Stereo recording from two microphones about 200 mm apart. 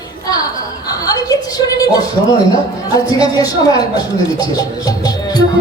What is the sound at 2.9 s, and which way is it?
Speech, 20° left (ahead or behind).